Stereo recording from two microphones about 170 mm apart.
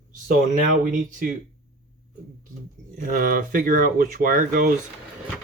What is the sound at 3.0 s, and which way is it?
Speech, 55° right (ahead or behind).